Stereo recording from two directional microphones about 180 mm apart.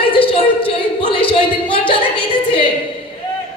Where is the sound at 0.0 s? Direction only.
30° left (ahead or behind).